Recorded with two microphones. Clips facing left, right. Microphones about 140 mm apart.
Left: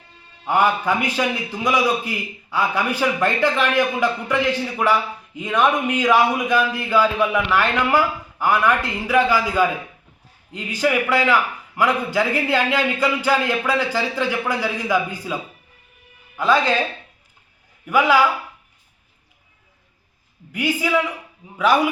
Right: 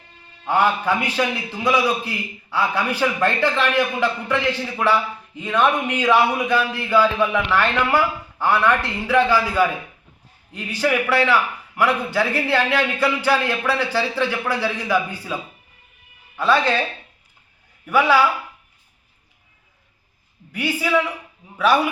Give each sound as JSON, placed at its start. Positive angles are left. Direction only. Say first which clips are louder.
{"t": 0.4, "sound": "a man's voice", "louder": "even", "side_deg": 15}
{"t": 5.4, "sound": "a man's voice", "louder": "even", "side_deg": 15}
{"t": 16.4, "sound": "a man's voice", "louder": "even", "side_deg": 15}
{"t": 17.8, "sound": "a man's voice", "louder": "even", "side_deg": 15}
{"t": 20.5, "sound": "a man's voice", "louder": "even", "side_deg": 15}